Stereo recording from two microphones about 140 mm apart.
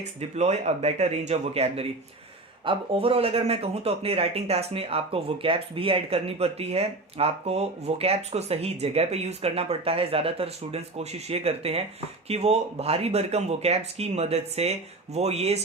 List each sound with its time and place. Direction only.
0.0 s speech: 55° right (ahead or behind)